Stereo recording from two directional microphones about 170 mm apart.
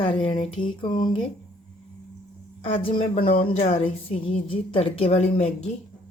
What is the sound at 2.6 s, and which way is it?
Speech, 35° left (ahead or behind).